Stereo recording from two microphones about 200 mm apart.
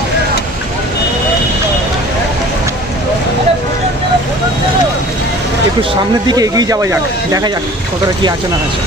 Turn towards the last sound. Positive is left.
turn(degrees=-15)  # may be behind; listen again after turning